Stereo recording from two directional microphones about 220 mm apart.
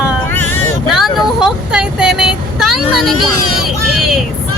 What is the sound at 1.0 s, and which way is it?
Speech, centre (ahead or behind).